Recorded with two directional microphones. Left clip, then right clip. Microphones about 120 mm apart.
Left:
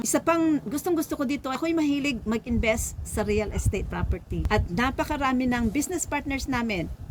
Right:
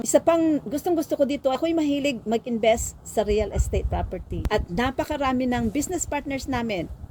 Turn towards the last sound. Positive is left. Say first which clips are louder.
# right 1 dB
turn(degrees=30)  # may be behind; listen again after turning